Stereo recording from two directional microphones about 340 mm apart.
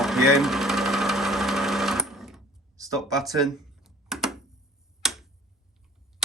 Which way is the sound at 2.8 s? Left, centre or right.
Centre.